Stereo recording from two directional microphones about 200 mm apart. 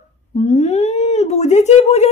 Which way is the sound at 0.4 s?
35° left (ahead or behind).